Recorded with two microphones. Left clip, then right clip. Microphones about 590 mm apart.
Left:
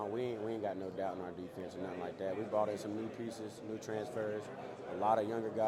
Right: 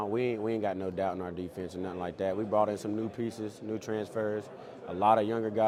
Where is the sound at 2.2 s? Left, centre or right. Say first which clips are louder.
Right 8 dB; right.